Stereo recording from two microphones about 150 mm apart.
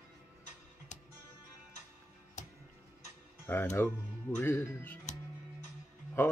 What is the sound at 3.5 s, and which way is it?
Speech, 15° left (ahead or behind).